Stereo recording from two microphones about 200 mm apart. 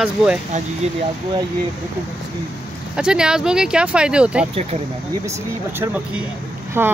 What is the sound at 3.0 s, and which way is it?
Speech, 5° right (ahead or behind).